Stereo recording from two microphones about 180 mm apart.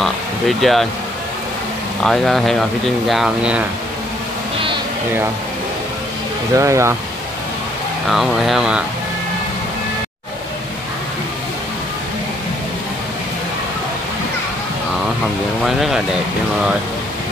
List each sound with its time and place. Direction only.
0.0 s a sound: centre (ahead or behind)
2.0 s speech: centre (ahead or behind)
6.5 s speech: 15° right (ahead or behind)
8.1 s speech: centre (ahead or behind)
15.6 s speech: centre (ahead or behind)